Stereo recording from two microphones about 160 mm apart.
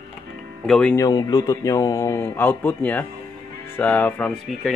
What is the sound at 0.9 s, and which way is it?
Speech, 20° left (ahead or behind).